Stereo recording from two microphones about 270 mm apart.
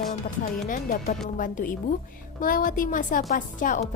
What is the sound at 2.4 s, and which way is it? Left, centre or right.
Speech, left.